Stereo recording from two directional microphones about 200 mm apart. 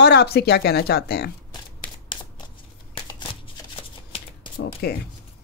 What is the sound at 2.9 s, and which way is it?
Shuffling cards, 25° left (ahead or behind).